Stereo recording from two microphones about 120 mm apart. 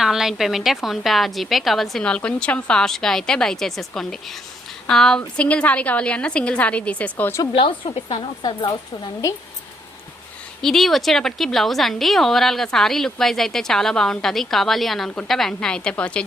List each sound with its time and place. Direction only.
0.0 s a woman's voice: 5° right (ahead or behind); by 7.4 s 15° left (ahead or behind)
7.5 s speech: 50° left (ahead or behind)
10.6 s a woman's voice: centre (ahead or behind)